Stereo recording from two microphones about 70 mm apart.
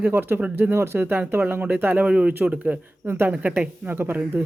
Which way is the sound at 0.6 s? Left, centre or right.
Right.